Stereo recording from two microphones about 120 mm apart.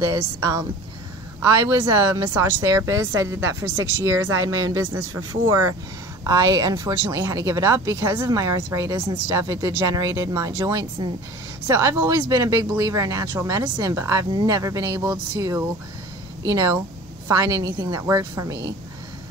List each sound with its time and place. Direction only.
0.0 s speech: 35° right (ahead or behind)
6.2 s speech: 30° right (ahead or behind)